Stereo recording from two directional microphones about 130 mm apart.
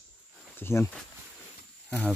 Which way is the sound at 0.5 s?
20° left (ahead or behind).